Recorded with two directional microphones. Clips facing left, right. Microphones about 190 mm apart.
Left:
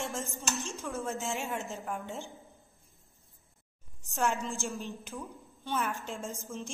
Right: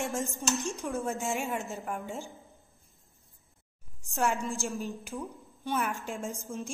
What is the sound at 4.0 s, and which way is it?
A woman's voice, 10° right (ahead or behind).